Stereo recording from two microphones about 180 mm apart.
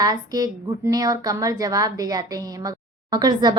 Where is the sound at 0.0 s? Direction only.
20° right (ahead or behind).